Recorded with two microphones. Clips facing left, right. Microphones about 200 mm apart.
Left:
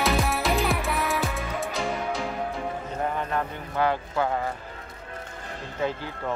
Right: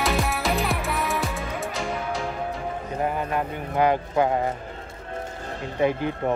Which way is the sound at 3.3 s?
15° right (ahead or behind).